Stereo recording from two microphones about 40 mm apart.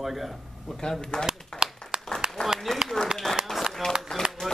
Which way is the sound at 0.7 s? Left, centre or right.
Centre.